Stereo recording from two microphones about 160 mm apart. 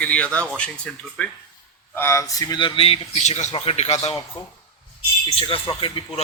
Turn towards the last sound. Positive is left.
turn(degrees=35)  # may be behind; listen again after turning